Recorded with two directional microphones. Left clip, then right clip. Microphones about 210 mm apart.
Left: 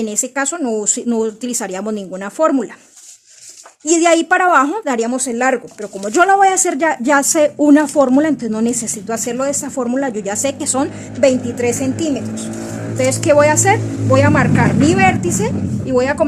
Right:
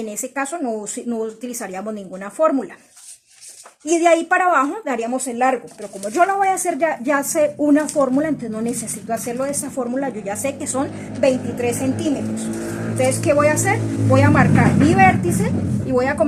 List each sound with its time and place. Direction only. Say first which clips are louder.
0.0 s speech: left 5 dB; 45° left (ahead or behind)
3.8 s a woman's voice: left 3 dB; 40° left (ahead or behind)